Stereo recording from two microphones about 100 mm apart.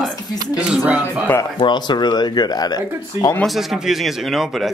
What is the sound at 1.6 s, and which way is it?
Speech, 50° left (ahead or behind).